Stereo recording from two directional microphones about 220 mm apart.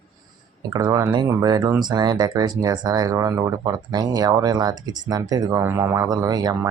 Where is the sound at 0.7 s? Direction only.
15° right (ahead or behind).